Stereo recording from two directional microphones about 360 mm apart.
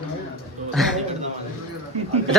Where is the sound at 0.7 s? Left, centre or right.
Centre.